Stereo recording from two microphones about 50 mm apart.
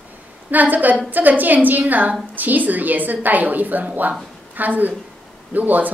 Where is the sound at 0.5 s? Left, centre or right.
Right.